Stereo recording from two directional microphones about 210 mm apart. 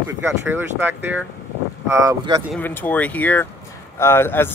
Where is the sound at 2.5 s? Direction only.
10° left (ahead or behind).